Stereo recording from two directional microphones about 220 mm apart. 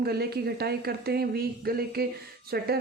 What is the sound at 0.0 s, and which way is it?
Speech, 45° right (ahead or behind).